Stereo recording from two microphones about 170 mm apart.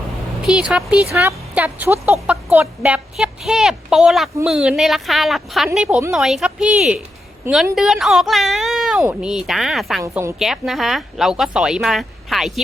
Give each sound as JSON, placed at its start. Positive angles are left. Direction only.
{"t": 0.4, "sound": "a woman's voice", "side_deg": -5}
{"t": 10.0, "sound": "a woman's voice", "side_deg": -15}
{"t": 10.3, "sound": "speech", "side_deg": 0}